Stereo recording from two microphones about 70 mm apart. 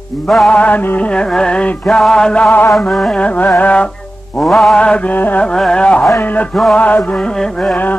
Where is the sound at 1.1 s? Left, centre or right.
Centre.